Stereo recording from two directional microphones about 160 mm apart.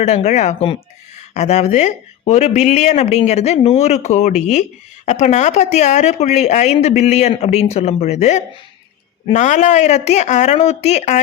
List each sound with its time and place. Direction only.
0.0 s speech: 45° left (ahead or behind)